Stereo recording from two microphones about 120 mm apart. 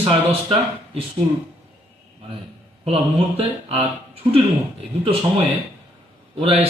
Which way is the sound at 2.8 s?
55° right (ahead or behind).